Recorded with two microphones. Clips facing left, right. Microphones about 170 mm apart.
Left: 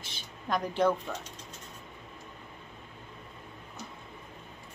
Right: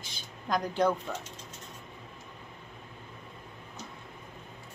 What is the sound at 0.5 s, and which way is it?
Speech, 5° left (ahead or behind).